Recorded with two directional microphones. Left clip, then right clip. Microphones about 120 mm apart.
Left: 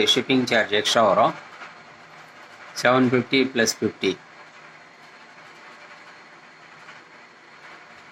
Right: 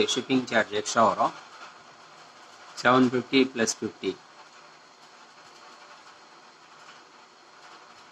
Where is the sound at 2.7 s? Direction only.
35° left (ahead or behind).